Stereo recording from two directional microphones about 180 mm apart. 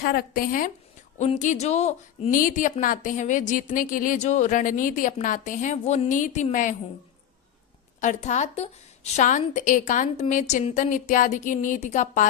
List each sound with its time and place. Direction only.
0.0 s a woman's voice: 55° left (ahead or behind)
8.0 s a woman's voice: 40° left (ahead or behind)